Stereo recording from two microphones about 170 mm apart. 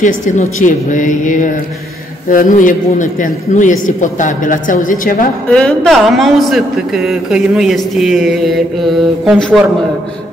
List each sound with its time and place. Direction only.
0.0 s a man's voice: 50° left (ahead or behind)
5.5 s a man's voice: 5° left (ahead or behind)